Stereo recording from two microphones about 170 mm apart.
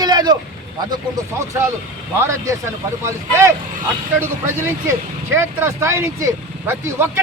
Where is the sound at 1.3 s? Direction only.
15° right (ahead or behind).